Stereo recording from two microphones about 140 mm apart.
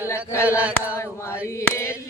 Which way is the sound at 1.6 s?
20° left (ahead or behind).